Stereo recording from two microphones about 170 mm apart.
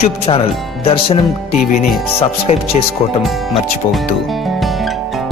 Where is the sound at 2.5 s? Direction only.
40° left (ahead or behind).